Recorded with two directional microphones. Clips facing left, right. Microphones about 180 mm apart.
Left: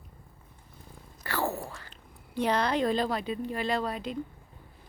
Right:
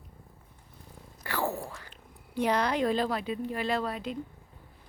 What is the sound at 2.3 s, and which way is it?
Speech, 10° right (ahead or behind).